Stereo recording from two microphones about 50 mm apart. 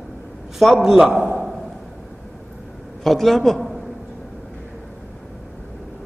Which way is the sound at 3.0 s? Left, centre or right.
Centre.